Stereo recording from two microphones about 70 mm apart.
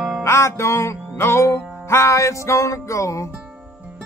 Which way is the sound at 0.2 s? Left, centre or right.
Left.